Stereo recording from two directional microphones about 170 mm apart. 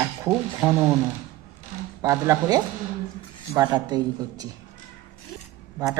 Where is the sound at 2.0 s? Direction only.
15° right (ahead or behind).